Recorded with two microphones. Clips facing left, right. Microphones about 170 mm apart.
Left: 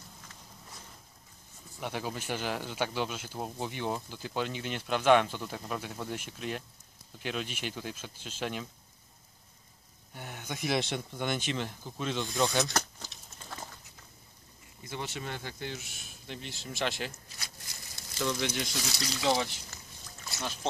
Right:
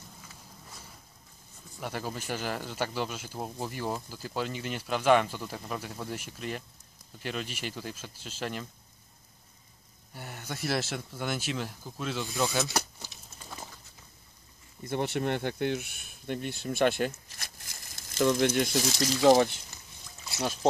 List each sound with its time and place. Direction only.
1.8 s speech: centre (ahead or behind)
10.1 s speech: 5° right (ahead or behind)
14.8 s speech: 55° right (ahead or behind)